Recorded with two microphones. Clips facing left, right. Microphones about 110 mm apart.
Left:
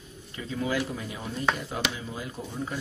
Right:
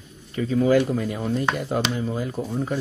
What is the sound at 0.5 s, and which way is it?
Speech, 45° right (ahead or behind).